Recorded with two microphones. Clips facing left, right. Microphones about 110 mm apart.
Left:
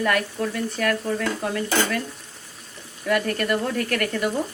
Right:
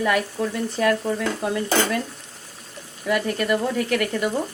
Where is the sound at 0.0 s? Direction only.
15° right (ahead or behind).